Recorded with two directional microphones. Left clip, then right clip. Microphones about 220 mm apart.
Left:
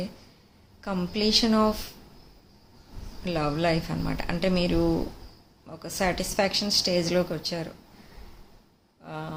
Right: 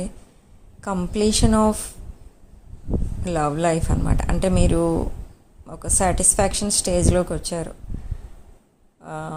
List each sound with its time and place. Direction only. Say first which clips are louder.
0.8 s a woman's voice: right 6 dB; 25° right (ahead or behind)
3.2 s a woman's voice: right 5 dB; 25° right (ahead or behind)
9.0 s a sound: right 5 dB; 25° right (ahead or behind)